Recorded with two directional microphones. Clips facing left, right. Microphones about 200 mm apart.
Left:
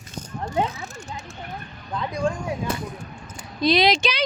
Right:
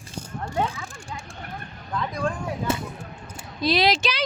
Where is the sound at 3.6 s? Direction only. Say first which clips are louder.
Left 2 dB; 5° right (ahead or behind).